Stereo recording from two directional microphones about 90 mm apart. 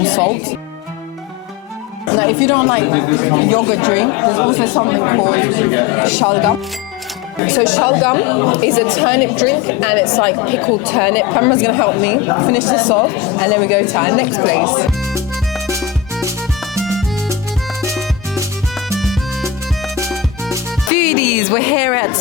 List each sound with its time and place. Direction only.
0.0 s music: 20° left (ahead or behind)
2.1 s speech: 20° left (ahead or behind)
7.5 s speech: 20° left (ahead or behind)
18.9 s music: centre (ahead or behind)
20.9 s speech: 20° left (ahead or behind)